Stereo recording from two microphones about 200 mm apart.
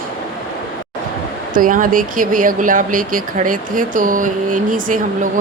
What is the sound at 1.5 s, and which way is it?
Speech, 40° right (ahead or behind).